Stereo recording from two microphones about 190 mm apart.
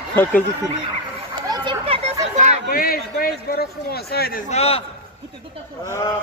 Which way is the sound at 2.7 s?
50° left (ahead or behind).